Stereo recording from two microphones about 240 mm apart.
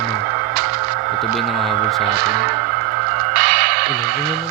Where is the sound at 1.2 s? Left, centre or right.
Centre.